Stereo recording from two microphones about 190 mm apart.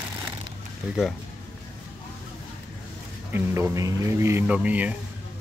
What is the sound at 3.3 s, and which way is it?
A man's voice, 15° right (ahead or behind).